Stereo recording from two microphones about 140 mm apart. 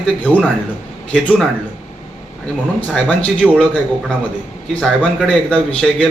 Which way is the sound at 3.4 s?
10° right (ahead or behind).